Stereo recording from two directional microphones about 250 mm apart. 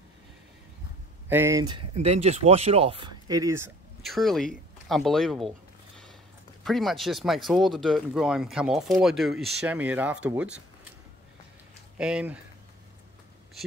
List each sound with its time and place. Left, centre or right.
1.3 s speech: centre
4.0 s speech: centre
6.6 s speech: centre
12.0 s speech: centre